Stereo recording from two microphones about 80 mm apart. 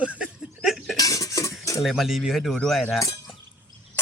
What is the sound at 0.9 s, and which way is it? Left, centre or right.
Dishes, left.